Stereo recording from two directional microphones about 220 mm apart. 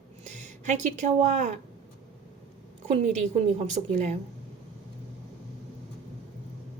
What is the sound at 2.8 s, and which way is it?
A woman's voice, 30° right (ahead or behind).